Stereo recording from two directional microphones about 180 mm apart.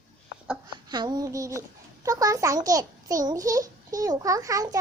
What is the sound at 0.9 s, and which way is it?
A child's voice, 25° right (ahead or behind).